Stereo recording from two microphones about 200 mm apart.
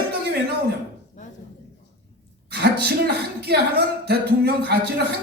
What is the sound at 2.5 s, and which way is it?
Speech, 50° right (ahead or behind).